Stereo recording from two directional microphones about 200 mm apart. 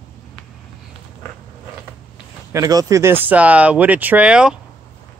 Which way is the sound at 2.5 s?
20° right (ahead or behind).